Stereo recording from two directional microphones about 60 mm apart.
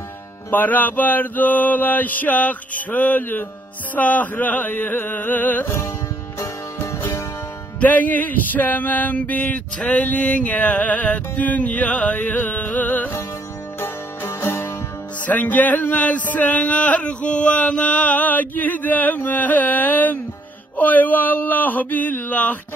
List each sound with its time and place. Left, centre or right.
0.5 s speech: left
6.4 s music: left
7.8 s speech: left
13.7 s music: left
15.2 s speech: left
20.7 s a sound: left